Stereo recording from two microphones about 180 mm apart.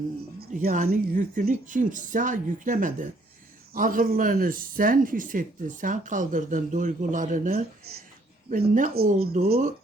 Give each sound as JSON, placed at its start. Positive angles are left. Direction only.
{"t": 0.3, "sound": "speech", "side_deg": -50}
{"t": 8.4, "sound": "speech", "side_deg": -45}